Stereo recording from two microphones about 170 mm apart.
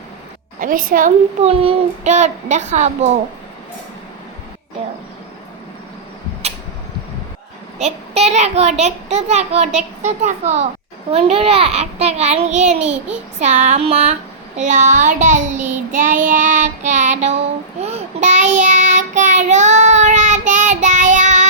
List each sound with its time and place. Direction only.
0.6 s child singing: 55° right (ahead or behind)
1.5 s child singing: 35° right (ahead or behind)
4.8 s vehicle: 35° right (ahead or behind)
7.8 s a child's voice: 40° right (ahead or behind)
13.4 s child singing: 45° right (ahead or behind)